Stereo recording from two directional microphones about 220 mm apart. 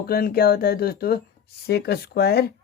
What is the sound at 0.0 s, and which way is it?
Speech, 45° left (ahead or behind).